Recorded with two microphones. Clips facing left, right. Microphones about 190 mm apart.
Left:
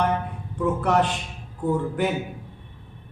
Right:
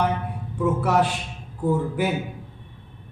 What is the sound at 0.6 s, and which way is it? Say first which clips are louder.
A man's voice: right 1 dB; 5° right (ahead or behind).